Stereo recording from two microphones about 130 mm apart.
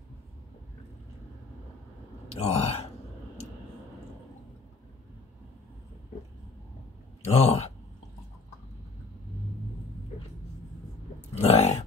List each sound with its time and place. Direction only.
2.4 s speech: 55° left (ahead or behind)
7.2 s speech: 55° left (ahead or behind)
11.3 s a sound: 55° left (ahead or behind)